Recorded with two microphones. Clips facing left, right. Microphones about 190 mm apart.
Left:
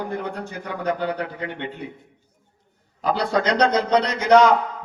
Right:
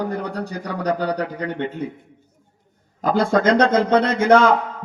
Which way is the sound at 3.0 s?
45° right (ahead or behind).